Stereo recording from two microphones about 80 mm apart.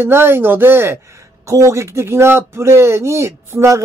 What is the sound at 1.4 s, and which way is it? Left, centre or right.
A man's voice, right.